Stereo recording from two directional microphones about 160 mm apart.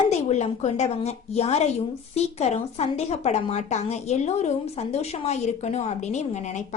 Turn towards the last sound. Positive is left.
turn(degrees=50)  # may be behind; listen again after turning